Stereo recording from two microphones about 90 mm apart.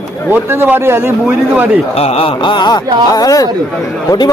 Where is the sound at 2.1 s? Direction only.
75° left (ahead or behind).